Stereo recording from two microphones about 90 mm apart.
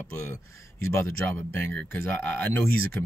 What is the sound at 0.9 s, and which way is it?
Speech, 25° left (ahead or behind).